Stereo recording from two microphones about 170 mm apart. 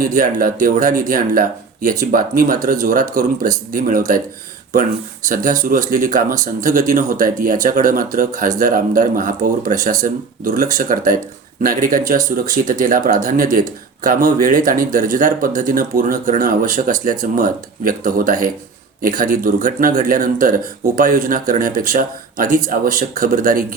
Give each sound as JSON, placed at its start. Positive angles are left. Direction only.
{"t": 0.0, "sound": "speech", "side_deg": -55}